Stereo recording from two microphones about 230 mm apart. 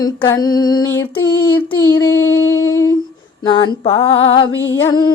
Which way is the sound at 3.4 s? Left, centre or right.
Centre.